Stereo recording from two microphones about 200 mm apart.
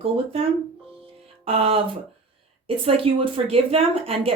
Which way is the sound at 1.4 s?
30° right (ahead or behind).